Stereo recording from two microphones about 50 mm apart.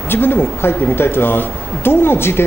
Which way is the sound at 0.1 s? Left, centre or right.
Left.